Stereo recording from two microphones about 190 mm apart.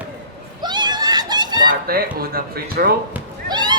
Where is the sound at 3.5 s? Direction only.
20° right (ahead or behind).